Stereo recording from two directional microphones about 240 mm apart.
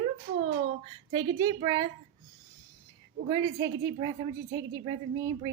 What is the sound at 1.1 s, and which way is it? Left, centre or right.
Speech, centre.